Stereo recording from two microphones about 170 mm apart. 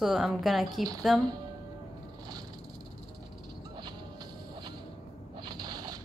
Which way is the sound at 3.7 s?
25° right (ahead or behind).